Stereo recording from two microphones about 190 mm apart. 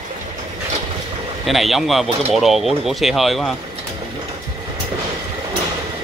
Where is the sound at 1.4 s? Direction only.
Centre (ahead or behind).